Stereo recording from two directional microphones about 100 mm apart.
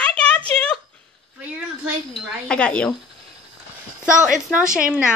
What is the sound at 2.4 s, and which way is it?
Speech, 10° left (ahead or behind).